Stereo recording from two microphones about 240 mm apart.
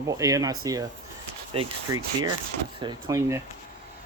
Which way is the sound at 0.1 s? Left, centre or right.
Centre.